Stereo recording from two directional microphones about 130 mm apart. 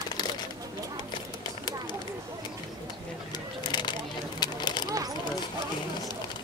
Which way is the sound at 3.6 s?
35° left (ahead or behind).